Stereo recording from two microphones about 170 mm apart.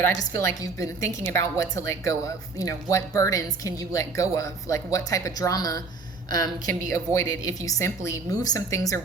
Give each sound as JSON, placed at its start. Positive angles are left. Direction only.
{"t": 0.1, "sound": "a woman's voice", "side_deg": 20}
{"t": 6.9, "sound": "a woman's voice", "side_deg": 15}